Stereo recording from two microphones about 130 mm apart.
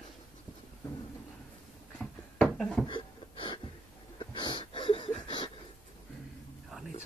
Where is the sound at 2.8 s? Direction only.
40° left (ahead or behind).